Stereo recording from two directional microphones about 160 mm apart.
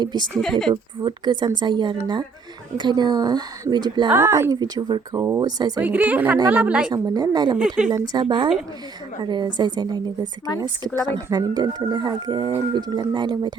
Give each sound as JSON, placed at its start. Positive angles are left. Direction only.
{"t": 0.0, "sound": "speech", "side_deg": -30}
{"t": 0.3, "sound": "a woman's voice", "side_deg": 0}
{"t": 0.7, "sound": "speech", "side_deg": -30}
{"t": 4.1, "sound": "a woman's voice", "side_deg": -15}
{"t": 4.6, "sound": "speech", "side_deg": -25}
{"t": 5.8, "sound": "a woman's voice", "side_deg": -10}
{"t": 6.9, "sound": "speech", "side_deg": -25}